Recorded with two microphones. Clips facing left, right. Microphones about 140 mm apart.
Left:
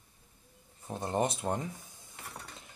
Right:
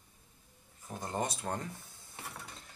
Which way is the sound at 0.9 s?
25° left (ahead or behind).